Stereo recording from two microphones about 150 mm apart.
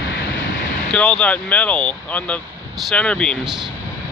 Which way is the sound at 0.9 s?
5° left (ahead or behind).